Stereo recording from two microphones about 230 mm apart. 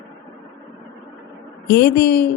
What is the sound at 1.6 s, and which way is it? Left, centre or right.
Speech, left.